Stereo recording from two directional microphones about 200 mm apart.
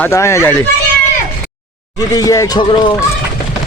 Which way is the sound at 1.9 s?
15° left (ahead or behind).